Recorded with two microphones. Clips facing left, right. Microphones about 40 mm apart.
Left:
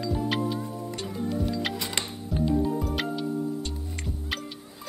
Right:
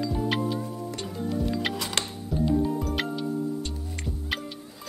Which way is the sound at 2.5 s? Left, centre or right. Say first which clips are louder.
Even; centre.